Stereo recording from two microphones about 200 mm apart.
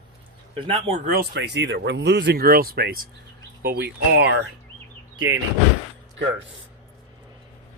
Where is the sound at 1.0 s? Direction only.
50° right (ahead or behind).